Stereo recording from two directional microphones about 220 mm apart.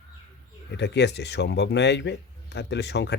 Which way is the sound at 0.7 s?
50° left (ahead or behind).